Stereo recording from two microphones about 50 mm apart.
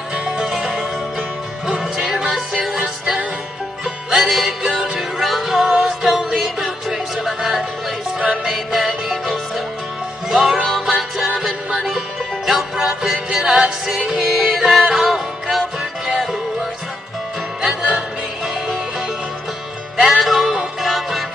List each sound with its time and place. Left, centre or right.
0.1 s music: centre
17.6 s music: centre
20.0 s music: centre